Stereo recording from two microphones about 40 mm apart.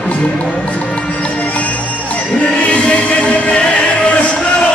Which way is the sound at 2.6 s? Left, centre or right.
Left.